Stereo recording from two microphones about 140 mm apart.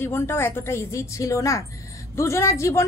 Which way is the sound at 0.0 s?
15° left (ahead or behind).